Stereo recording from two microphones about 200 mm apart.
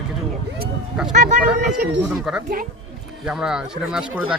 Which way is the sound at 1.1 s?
40° right (ahead or behind).